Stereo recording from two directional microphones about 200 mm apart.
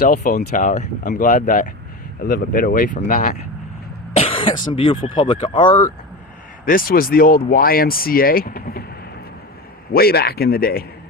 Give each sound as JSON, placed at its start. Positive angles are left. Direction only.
{"t": 0.3, "sound": "speech", "side_deg": 40}
{"t": 4.2, "sound": "cough", "side_deg": 25}
{"t": 5.1, "sound": "speech", "side_deg": 25}
{"t": 6.7, "sound": "speech", "side_deg": 45}
{"t": 9.9, "sound": "speech", "side_deg": 50}